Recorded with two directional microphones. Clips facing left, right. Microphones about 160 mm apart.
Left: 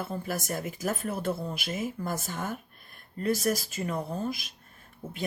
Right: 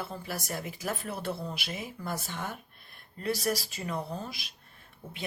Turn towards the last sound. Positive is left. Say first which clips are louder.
# left 5 dB
turn(degrees=45)  # may be behind; listen again after turning